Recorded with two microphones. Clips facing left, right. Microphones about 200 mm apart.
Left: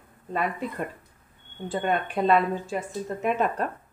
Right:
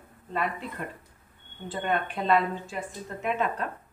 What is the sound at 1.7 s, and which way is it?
A woman's voice, 45° left (ahead or behind).